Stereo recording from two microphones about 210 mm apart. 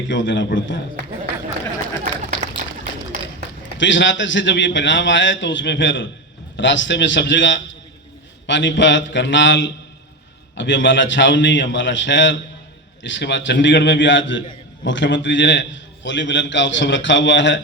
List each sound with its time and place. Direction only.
0.1 s a man's voice: 60° left (ahead or behind)
2.3 s run: 25° right (ahead or behind)
3.8 s a man's voice: 60° left (ahead or behind)